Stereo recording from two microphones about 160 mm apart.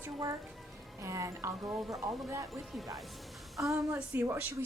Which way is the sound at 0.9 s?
20° right (ahead or behind).